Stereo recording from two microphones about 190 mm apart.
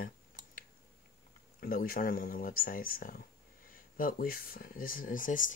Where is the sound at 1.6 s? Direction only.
50° left (ahead or behind).